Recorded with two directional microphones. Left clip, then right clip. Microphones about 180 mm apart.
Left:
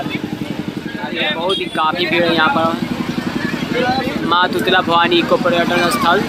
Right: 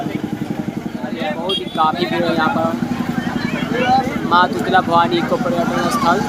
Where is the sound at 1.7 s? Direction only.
Centre (ahead or behind).